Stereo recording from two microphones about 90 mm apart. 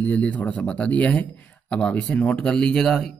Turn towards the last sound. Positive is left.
turn(degrees=5)  # may be behind; listen again after turning